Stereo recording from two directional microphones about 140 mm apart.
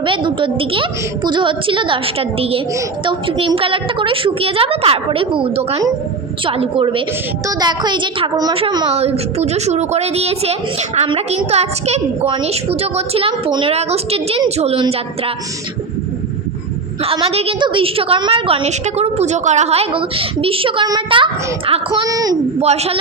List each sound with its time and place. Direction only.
0.0 s a woman's voice: 35° right (ahead or behind)
17.2 s a woman's voice: 45° right (ahead or behind); by 22.4 s 25° right (ahead or behind)
22.6 s a woman's voice: 50° right (ahead or behind)